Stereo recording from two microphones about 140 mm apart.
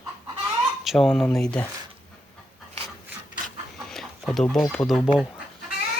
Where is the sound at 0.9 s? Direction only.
Centre (ahead or behind).